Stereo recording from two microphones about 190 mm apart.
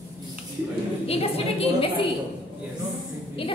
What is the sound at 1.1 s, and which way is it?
Speech, 30° left (ahead or behind).